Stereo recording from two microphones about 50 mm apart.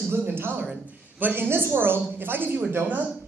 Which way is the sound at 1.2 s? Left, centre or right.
Right.